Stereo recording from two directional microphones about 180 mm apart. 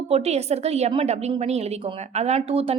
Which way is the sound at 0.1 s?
35° right (ahead or behind).